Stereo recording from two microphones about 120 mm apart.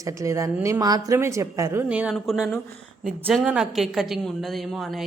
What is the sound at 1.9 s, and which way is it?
A woman's voice, 10° right (ahead or behind).